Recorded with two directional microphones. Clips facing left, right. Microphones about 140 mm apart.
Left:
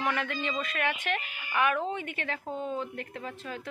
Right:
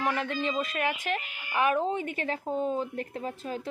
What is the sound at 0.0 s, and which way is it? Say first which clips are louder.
Speech: right 2 dB; 35° right (ahead or behind).